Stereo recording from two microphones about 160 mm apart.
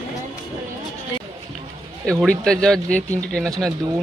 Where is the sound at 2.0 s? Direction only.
5° left (ahead or behind).